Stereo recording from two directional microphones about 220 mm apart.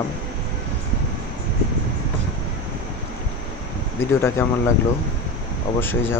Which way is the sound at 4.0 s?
10° left (ahead or behind).